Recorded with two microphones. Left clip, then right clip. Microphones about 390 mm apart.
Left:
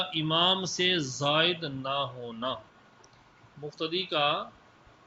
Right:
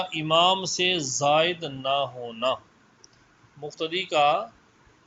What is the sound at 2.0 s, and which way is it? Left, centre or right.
Speech, right.